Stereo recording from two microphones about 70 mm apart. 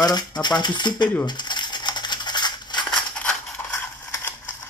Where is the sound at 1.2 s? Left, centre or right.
Left.